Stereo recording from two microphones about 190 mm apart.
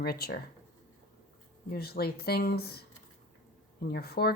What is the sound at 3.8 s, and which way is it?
Speech, 55° left (ahead or behind).